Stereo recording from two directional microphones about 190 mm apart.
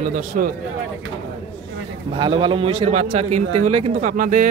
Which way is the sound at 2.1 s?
25° right (ahead or behind).